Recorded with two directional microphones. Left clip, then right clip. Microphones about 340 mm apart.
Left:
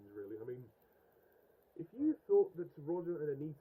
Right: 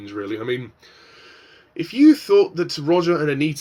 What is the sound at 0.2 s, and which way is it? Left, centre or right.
Speech, centre.